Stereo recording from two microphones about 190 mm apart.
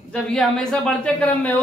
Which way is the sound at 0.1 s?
5° left (ahead or behind).